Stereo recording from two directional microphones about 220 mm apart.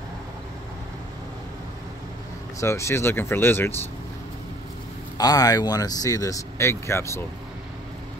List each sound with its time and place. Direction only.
2.6 s speech: 15° left (ahead or behind)
5.1 s speech: 15° left (ahead or behind)